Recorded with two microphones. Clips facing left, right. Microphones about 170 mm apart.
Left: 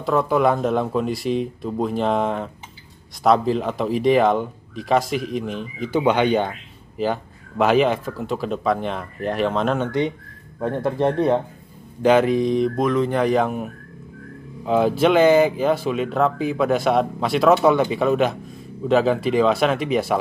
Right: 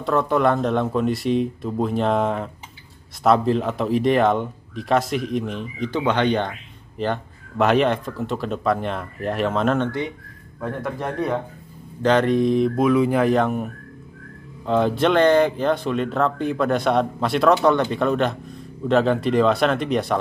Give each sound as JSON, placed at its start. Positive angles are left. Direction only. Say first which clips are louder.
{"t": 0.0, "sound": "speech", "louder": "left 1 dB", "side_deg": 0}
{"t": 9.8, "sound": "speech", "louder": "left 4 dB", "side_deg": 20}
{"t": 12.0, "sound": "speech", "louder": "left 1 dB", "side_deg": 10}